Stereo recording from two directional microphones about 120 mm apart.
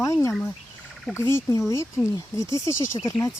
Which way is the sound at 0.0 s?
25° left (ahead or behind).